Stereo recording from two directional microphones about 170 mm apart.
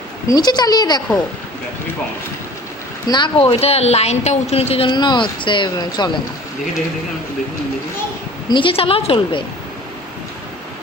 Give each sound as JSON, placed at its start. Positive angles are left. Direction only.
{"t": 0.3, "sound": "speech", "side_deg": 25}
{"t": 3.1, "sound": "a woman's voice", "side_deg": 30}
{"t": 8.4, "sound": "a woman's voice", "side_deg": 30}